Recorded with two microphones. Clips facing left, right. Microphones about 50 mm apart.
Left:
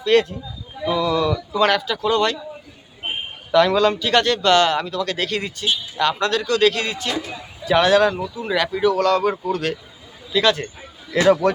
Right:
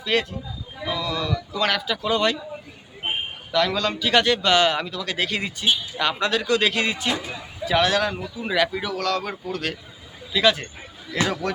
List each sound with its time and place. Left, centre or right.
0.0 s speech: centre
0.9 s speech: centre
1.7 s speech: centre
3.5 s speech: centre
4.0 s speech: centre
7.3 s speech: centre
8.1 s speech: centre